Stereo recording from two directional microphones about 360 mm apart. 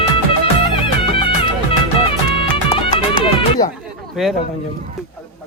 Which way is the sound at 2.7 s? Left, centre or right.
Centre.